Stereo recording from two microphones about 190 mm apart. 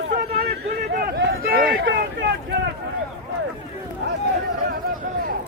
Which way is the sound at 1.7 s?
65° right (ahead or behind).